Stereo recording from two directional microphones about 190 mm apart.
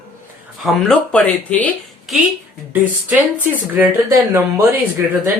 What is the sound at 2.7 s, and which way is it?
Speech, 10° right (ahead or behind).